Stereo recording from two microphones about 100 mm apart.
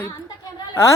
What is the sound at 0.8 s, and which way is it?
Speech, 25° left (ahead or behind).